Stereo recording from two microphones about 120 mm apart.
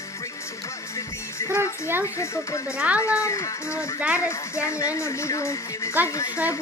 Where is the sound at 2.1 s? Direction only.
25° left (ahead or behind).